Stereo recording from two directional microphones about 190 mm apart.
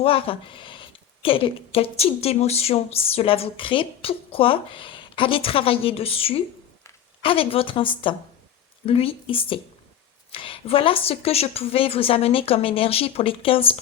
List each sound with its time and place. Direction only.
0.0 s speech: 30° left (ahead or behind)